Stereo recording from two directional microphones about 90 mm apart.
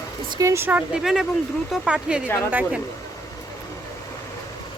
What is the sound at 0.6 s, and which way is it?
Speech, 20° right (ahead or behind).